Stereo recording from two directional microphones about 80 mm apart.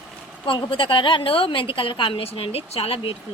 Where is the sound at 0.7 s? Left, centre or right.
Left.